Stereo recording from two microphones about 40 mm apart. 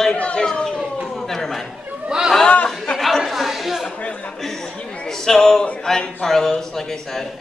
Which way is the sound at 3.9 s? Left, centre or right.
Left.